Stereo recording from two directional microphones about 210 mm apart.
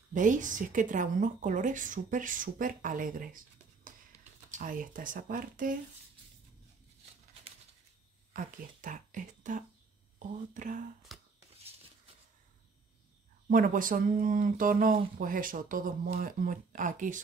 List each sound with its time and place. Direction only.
0.1 s speech: 40° right (ahead or behind)
8.3 s speech: 40° right (ahead or behind)
11.1 s a sound: centre (ahead or behind)
13.5 s speech: 40° right (ahead or behind)